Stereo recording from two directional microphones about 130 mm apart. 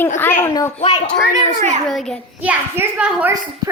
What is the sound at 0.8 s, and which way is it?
Speech, 45° left (ahead or behind).